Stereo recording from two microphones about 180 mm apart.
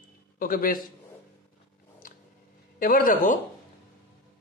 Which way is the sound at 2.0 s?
50° left (ahead or behind).